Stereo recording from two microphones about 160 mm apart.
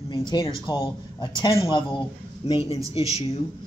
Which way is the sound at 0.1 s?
30° left (ahead or behind).